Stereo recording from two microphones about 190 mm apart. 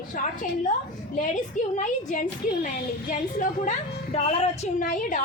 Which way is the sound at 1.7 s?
40° left (ahead or behind).